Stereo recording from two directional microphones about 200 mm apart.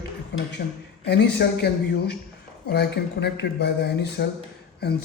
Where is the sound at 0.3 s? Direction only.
55° left (ahead or behind).